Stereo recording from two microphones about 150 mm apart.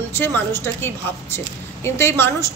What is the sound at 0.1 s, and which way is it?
A woman's voice, 15° left (ahead or behind).